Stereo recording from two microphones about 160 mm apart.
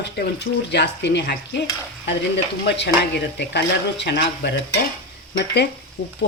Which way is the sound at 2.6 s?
90° left.